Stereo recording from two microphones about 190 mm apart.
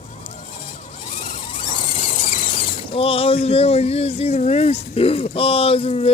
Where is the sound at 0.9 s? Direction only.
25° left (ahead or behind).